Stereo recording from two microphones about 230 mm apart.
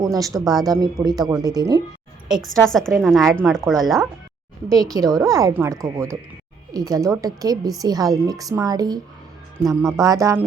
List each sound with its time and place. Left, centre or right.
0.0 s speech: centre
0.3 s a woman's voice: centre
0.7 s a woman's voice: centre
2.4 s a woman's voice: centre
4.8 s a woman's voice: centre